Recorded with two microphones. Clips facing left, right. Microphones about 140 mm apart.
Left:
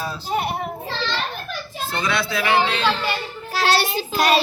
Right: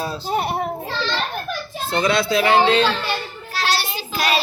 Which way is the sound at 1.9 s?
25° right (ahead or behind).